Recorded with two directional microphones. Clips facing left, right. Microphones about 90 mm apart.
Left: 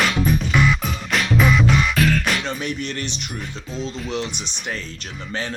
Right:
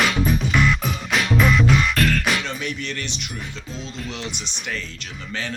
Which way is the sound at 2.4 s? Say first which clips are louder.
Left 2 dB; 35° left (ahead or behind).